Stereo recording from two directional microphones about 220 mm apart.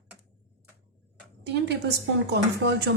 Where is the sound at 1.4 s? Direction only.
50° right (ahead or behind).